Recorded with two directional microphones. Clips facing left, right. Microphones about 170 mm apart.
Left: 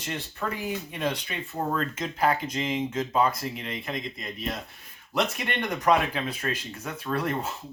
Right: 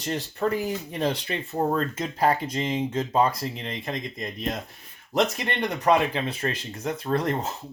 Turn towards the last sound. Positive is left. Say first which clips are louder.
# right 3 dB
turn(degrees=-35)  # may be behind; listen again after turning